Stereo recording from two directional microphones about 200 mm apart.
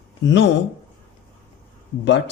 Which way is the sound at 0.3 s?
60° left (ahead or behind).